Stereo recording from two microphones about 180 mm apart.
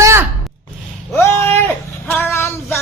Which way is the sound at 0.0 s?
15° right (ahead or behind).